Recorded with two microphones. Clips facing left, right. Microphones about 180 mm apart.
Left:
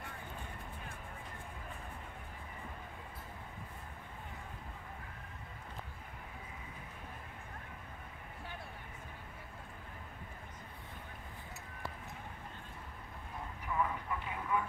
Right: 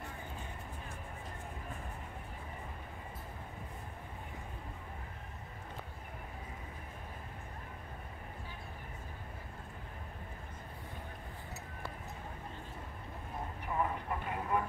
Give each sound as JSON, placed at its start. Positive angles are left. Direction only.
{"t": 13.7, "sound": "vehicle", "side_deg": -40}